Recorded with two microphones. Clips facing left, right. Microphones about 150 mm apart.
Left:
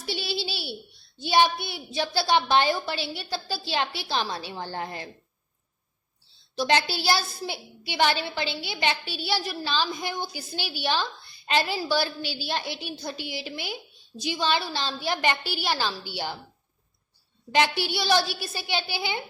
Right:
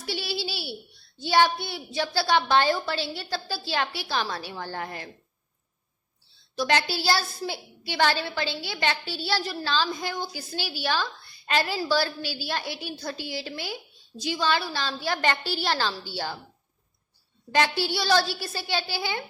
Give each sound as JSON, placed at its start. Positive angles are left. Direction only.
{"t": 0.0, "sound": "a sound", "side_deg": 20}
{"t": 1.2, "sound": "a woman's voice", "side_deg": 20}
{"t": 6.6, "sound": "a woman's voice", "side_deg": 25}
{"t": 17.5, "sound": "a woman's voice", "side_deg": 20}